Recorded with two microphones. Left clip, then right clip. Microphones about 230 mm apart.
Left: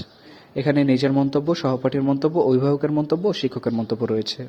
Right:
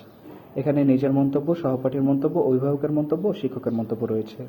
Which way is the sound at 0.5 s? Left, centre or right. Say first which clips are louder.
Left 2 dB; left.